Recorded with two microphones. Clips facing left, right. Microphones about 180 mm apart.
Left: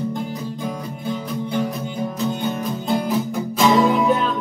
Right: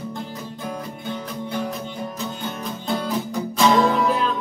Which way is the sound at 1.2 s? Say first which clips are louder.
Left 5 dB; 10° left (ahead or behind).